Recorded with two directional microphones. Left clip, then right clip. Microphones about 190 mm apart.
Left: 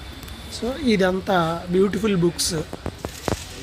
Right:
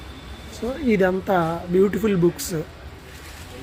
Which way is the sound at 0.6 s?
Centre (ahead or behind).